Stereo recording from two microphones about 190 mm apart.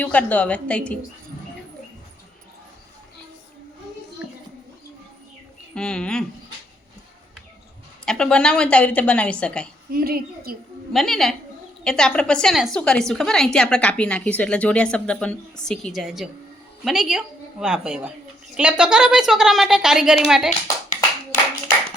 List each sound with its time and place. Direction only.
0.0 s a woman's voice: 5° left (ahead or behind)
5.7 s a woman's voice: 5° left (ahead or behind)
8.0 s a woman's voice: 5° left (ahead or behind)
9.9 s a woman's voice: 50° right (ahead or behind)
10.9 s a woman's voice: centre (ahead or behind)